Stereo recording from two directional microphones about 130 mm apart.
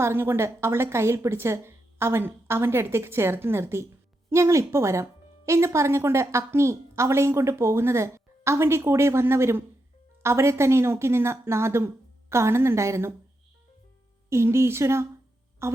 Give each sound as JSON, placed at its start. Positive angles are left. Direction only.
{"t": 0.0, "sound": "a woman's voice", "side_deg": -20}
{"t": 14.3, "sound": "a woman's voice", "side_deg": -20}